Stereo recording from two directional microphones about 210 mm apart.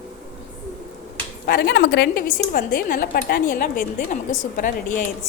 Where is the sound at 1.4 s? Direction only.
50° left (ahead or behind).